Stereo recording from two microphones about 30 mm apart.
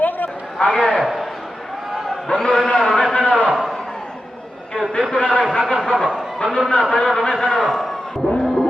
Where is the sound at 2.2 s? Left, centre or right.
Left.